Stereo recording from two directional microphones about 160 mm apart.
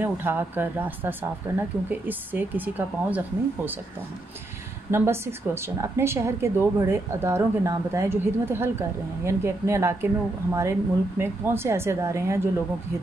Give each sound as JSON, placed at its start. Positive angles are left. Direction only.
{"t": 0.0, "sound": "a woman's voice", "side_deg": -15}
{"t": 4.9, "sound": "a woman's voice", "side_deg": -15}